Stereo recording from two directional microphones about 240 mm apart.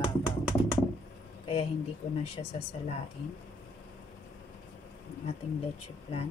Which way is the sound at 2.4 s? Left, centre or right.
Left.